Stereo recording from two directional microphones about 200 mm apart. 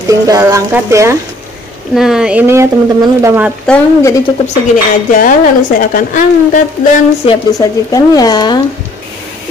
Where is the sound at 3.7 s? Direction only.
15° left (ahead or behind).